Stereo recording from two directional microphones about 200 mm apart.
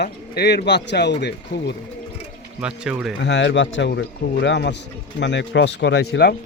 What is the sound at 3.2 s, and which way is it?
Speech, 65° left (ahead or behind).